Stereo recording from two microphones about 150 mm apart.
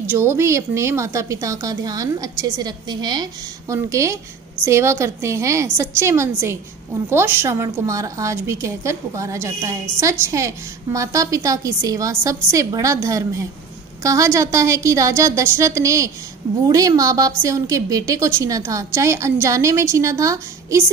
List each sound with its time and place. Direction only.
0.1 s a woman's voice: 15° right (ahead or behind)